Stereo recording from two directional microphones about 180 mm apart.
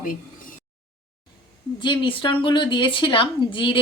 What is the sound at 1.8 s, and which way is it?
Speech, 25° left (ahead or behind).